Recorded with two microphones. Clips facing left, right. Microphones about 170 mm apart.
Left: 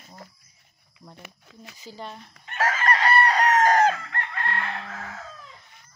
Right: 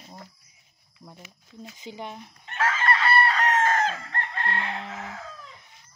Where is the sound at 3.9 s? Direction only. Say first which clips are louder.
Even; 30° right (ahead or behind).